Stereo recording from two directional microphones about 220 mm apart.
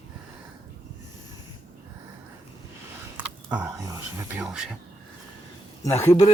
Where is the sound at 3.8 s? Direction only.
15° right (ahead or behind).